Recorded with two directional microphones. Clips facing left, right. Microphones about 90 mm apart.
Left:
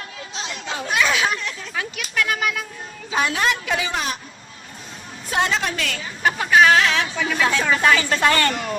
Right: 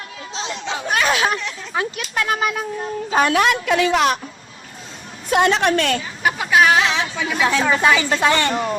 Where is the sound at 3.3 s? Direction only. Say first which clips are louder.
Right 5 dB; 60° right (ahead or behind); by 4.2 s 75° right (ahead or behind).